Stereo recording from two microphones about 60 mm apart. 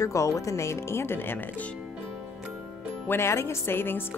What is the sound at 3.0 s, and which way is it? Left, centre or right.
Speech, left.